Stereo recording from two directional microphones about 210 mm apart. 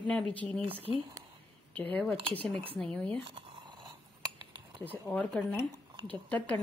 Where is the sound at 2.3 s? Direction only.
5° left (ahead or behind).